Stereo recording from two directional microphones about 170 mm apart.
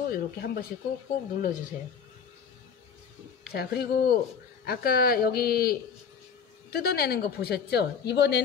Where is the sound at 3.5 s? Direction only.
70° left (ahead or behind).